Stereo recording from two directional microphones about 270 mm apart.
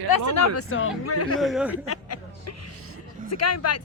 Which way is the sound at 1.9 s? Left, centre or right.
Left.